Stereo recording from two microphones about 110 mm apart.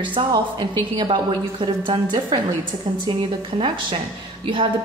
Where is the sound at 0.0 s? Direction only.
45° right (ahead or behind).